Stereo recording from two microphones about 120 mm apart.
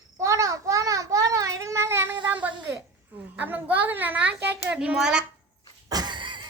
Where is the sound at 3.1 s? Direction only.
15° right (ahead or behind).